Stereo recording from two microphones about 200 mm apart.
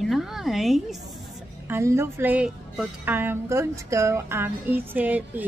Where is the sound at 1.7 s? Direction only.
15° right (ahead or behind).